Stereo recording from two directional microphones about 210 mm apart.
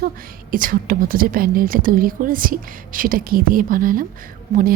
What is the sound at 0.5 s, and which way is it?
A woman's voice, 40° right (ahead or behind).